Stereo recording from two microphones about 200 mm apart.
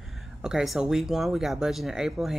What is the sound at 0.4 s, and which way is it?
Speech, 5° right (ahead or behind).